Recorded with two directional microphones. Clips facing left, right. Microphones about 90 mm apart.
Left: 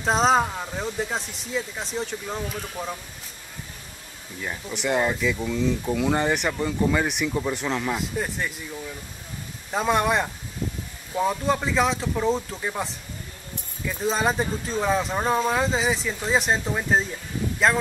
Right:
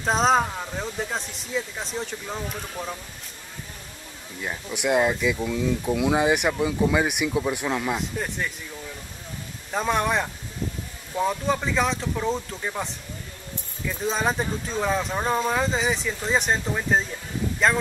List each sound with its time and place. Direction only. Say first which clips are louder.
0.0 s speech: left 1 dB; centre (ahead or behind)
4.4 s speech: right 1 dB; 5° right (ahead or behind)
9.7 s speech: left 2 dB; centre (ahead or behind)